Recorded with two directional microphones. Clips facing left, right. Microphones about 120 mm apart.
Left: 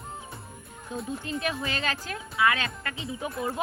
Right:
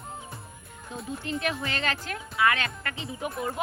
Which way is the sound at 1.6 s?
15° left (ahead or behind).